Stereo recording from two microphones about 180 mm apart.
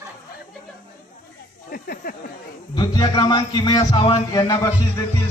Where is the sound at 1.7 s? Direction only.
55° left (ahead or behind).